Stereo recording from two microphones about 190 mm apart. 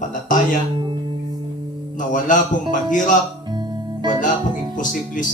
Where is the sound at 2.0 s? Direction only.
45° left (ahead or behind).